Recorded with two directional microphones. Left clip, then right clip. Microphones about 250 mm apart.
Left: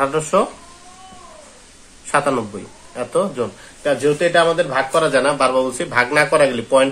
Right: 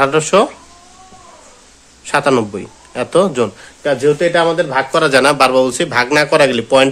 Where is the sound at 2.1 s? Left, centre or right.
Right.